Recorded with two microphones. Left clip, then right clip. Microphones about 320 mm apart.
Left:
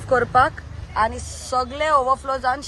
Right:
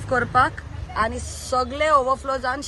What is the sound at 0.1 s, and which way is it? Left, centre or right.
Speech, left.